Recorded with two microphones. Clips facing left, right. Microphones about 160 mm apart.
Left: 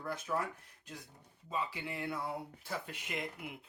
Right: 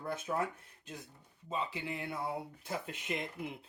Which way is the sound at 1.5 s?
20° right (ahead or behind).